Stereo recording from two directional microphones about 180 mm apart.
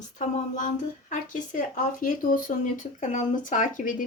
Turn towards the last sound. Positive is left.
turn(degrees=50)  # may be behind; listen again after turning